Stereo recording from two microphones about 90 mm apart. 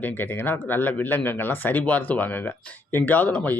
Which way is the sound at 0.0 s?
20° left (ahead or behind).